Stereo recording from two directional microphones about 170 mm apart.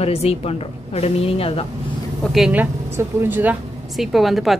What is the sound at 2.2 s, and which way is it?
Speech, centre (ahead or behind).